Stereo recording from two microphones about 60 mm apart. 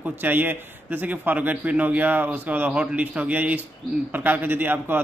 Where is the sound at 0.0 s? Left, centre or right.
Right.